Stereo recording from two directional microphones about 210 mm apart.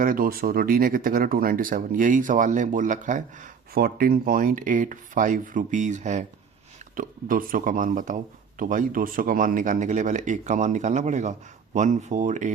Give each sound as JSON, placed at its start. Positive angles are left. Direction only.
{"t": 0.0, "sound": "speech", "side_deg": -40}